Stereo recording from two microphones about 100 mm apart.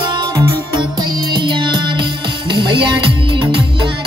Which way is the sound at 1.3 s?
50° right (ahead or behind).